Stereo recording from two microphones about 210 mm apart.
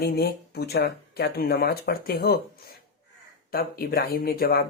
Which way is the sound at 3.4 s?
45° left (ahead or behind).